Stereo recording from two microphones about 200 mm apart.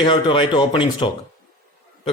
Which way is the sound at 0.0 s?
25° left (ahead or behind).